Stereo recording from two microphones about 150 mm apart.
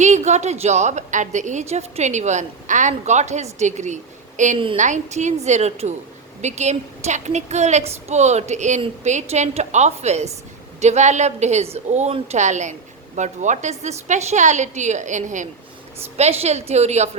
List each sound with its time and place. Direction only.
0.0 s a woman's voice: 50° right (ahead or behind)
4.5 s a woman's voice: 35° right (ahead or behind)
4.8 s a woman's voice: 55° right (ahead or behind)